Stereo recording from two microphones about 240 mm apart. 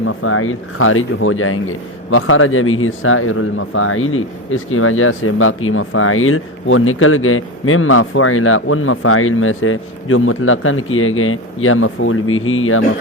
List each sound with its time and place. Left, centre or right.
0.0 s speech: left